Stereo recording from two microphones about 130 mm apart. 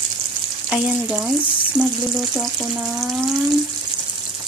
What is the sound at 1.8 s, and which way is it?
Speech, 15° right (ahead or behind).